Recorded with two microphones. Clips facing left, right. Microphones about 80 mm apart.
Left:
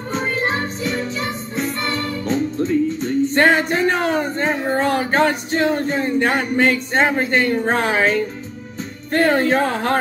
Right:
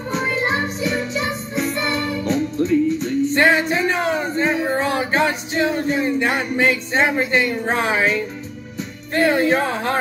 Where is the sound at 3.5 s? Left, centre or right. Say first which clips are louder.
Left 1 dB; left.